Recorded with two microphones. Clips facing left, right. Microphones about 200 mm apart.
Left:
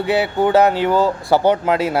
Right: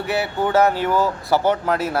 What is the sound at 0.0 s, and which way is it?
A man's voice, 20° left (ahead or behind).